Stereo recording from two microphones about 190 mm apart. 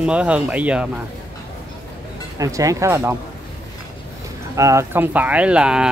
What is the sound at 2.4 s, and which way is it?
Speech, 15° right (ahead or behind).